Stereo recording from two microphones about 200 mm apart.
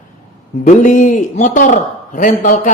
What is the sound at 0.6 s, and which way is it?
Speech, 40° left (ahead or behind).